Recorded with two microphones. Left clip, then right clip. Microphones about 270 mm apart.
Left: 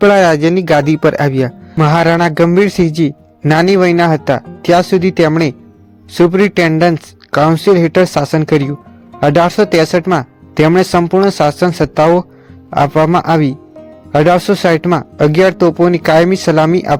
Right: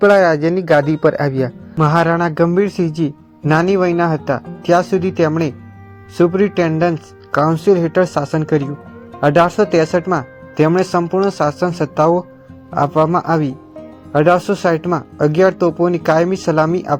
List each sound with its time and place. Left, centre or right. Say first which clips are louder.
0.0 s a man's voice: left 3 dB; left